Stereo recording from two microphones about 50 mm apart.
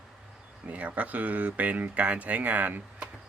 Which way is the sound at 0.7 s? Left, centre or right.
Right.